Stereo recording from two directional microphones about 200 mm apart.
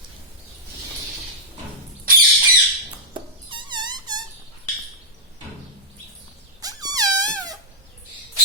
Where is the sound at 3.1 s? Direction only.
25° right (ahead or behind).